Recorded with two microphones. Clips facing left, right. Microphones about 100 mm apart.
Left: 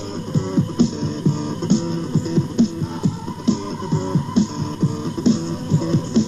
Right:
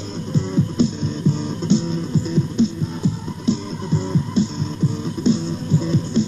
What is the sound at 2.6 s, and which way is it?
Music, 65° left (ahead or behind).